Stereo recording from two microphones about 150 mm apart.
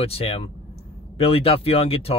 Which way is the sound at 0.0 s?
40° left (ahead or behind).